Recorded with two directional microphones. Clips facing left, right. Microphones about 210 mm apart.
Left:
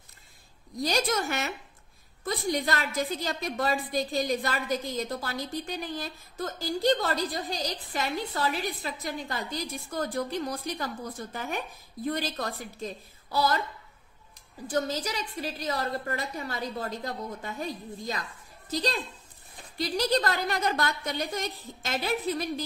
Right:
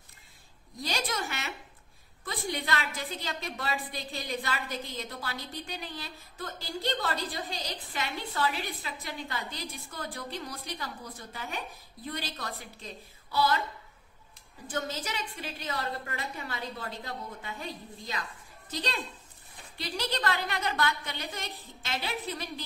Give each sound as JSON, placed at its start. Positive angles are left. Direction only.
{"t": 0.8, "sound": "a woman's voice", "side_deg": 45}
{"t": 14.7, "sound": "a woman's voice", "side_deg": 35}